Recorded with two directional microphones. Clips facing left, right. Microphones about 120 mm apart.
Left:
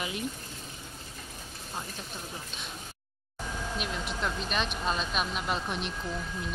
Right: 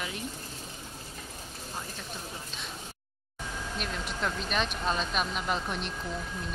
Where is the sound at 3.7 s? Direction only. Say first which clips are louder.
Right 1 dB; centre (ahead or behind).